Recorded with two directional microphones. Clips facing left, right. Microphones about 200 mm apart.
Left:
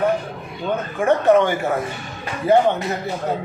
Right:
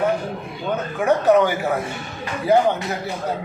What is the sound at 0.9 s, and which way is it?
Speech, centre (ahead or behind).